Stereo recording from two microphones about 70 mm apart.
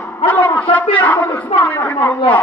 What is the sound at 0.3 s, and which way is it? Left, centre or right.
Speech, left.